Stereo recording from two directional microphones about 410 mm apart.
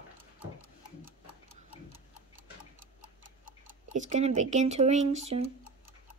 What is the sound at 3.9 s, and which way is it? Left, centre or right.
Speech, centre.